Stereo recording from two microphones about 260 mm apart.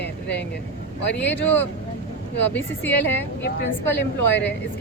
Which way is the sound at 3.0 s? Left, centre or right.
Left.